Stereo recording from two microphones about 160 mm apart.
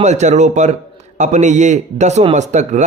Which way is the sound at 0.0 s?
45° right (ahead or behind).